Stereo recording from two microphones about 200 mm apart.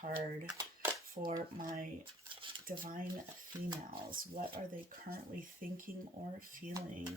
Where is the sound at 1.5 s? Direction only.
45° right (ahead or behind).